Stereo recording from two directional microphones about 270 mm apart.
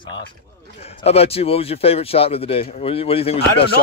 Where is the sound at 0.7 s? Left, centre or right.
Left.